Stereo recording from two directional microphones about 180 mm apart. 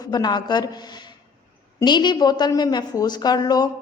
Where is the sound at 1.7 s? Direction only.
25° left (ahead or behind).